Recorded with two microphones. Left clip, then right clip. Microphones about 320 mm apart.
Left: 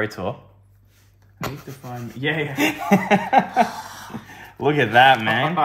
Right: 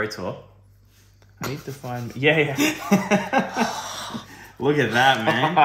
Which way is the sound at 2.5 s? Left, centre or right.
Left.